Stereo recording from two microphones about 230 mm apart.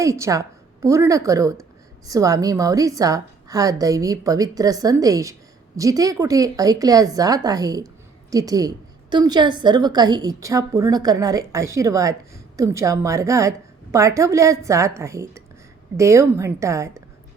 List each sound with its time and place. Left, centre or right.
0.0 s a woman's voice: centre